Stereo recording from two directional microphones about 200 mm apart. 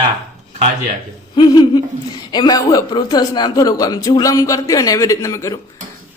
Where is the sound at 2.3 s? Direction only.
20° left (ahead or behind).